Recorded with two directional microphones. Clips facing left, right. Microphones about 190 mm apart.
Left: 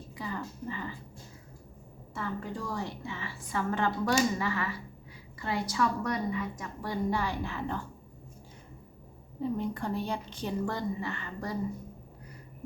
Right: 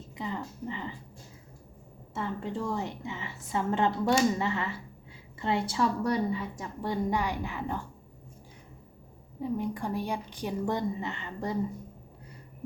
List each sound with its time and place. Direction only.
0.2 s a sound: 20° right (ahead or behind)
2.1 s a woman's voice: 25° right (ahead or behind)
7.1 s a woman's voice: 15° right (ahead or behind)
9.4 s a woman's voice: 10° right (ahead or behind)